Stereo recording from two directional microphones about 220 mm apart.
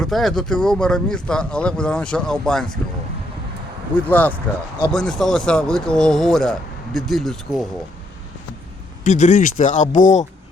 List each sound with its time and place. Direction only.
0.0 s speech: centre (ahead or behind)
3.9 s speech: 5° left (ahead or behind)
9.0 s speech: 35° left (ahead or behind)